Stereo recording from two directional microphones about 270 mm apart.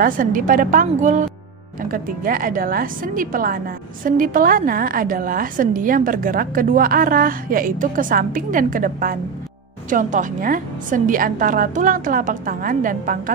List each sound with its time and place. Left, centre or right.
0.0 s a woman's voice: right